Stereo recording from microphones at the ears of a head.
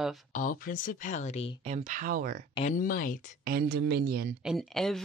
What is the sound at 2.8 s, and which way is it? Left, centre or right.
Speech, left.